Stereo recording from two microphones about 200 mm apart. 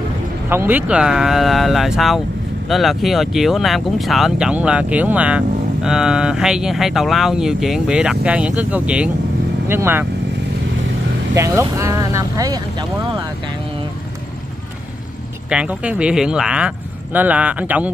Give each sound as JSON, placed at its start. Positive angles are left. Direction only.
{"t": 0.5, "sound": "speech", "side_deg": -10}
{"t": 11.3, "sound": "speech", "side_deg": -15}
{"t": 15.5, "sound": "speech", "side_deg": -5}